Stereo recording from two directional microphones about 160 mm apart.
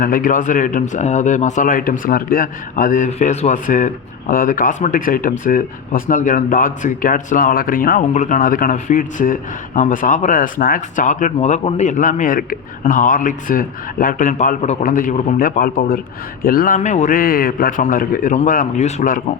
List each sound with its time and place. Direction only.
0.0 s speech: 60° left (ahead or behind)